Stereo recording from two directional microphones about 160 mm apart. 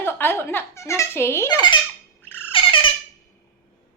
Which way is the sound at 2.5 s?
30° left (ahead or behind).